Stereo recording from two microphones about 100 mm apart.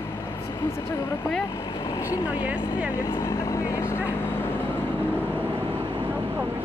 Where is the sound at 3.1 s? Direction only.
35° left (ahead or behind).